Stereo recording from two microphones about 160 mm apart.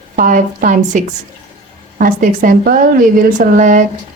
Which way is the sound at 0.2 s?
55° right (ahead or behind).